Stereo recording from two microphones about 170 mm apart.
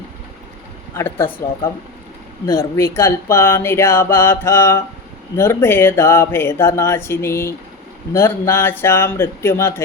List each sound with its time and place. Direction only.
0.9 s speech: 15° left (ahead or behind)
2.5 s speech: 15° left (ahead or behind)